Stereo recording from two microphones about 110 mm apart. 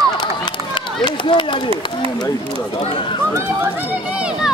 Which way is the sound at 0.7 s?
45° left (ahead or behind).